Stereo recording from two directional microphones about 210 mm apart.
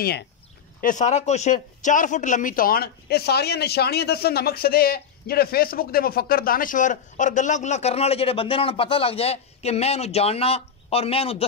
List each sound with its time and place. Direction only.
0.7 s speech: 35° left (ahead or behind)